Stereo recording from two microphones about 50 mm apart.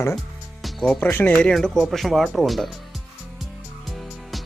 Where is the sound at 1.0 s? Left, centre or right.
Left.